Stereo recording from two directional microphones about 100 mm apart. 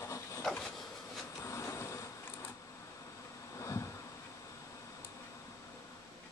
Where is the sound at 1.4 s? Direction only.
30° left (ahead or behind).